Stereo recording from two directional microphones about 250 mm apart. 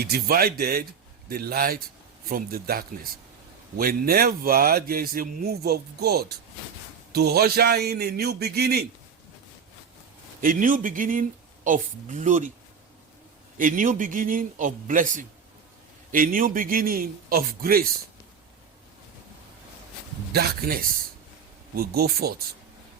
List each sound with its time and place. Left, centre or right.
0.0 s a man's voice: right
10.4 s a man's voice: right
13.6 s a man's voice: right
20.3 s a man's voice: right